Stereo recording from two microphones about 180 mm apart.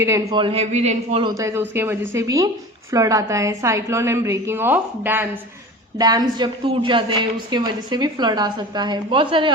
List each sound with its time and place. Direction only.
0.0 s a woman's voice: 15° right (ahead or behind)
0.3 s a man's voice: 30° right (ahead or behind)
1.3 s a woman's voice: 15° right (ahead or behind)
6.0 s a woman's voice: 20° right (ahead or behind)